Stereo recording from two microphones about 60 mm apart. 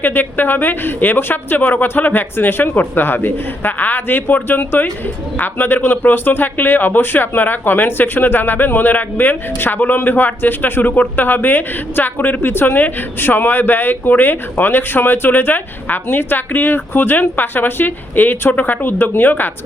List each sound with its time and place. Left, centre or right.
0.0 s speech: left